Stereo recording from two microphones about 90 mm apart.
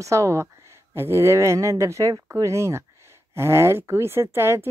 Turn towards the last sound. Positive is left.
turn(degrees=-30)  # may be behind; listen again after turning